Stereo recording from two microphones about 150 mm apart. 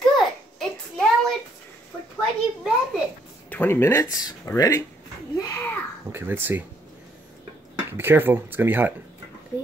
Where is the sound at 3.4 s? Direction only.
10° left (ahead or behind).